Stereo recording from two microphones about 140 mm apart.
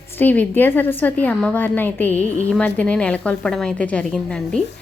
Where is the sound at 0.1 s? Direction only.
15° left (ahead or behind).